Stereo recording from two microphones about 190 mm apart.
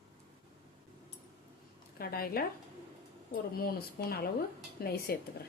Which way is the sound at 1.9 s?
50° left (ahead or behind).